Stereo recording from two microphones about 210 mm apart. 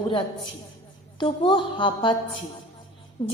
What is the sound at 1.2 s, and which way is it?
Speech, 25° left (ahead or behind).